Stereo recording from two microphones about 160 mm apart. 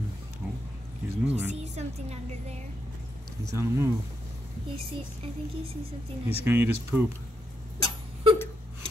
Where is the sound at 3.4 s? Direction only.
20° right (ahead or behind).